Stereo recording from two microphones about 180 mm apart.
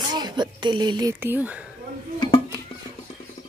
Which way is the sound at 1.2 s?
10° right (ahead or behind).